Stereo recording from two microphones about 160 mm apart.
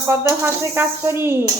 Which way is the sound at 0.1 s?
15° right (ahead or behind).